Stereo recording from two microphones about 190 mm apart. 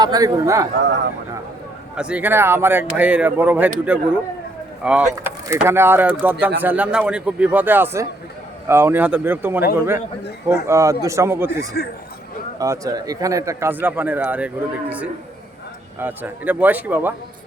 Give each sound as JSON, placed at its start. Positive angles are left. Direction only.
{"t": 0.0, "sound": "speech", "side_deg": -20}
{"t": 2.0, "sound": "speech", "side_deg": -5}